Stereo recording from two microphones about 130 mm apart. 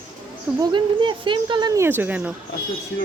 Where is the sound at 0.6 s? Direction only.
35° right (ahead or behind).